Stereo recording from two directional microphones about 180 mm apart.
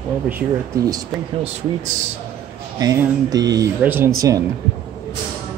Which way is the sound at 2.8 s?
20° right (ahead or behind).